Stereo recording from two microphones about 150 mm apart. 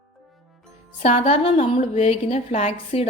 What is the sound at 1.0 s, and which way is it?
A woman's voice, 40° left (ahead or behind).